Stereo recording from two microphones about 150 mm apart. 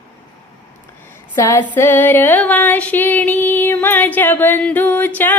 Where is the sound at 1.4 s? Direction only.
15° left (ahead or behind).